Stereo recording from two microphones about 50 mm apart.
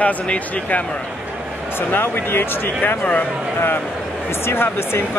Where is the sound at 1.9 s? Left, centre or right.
Left.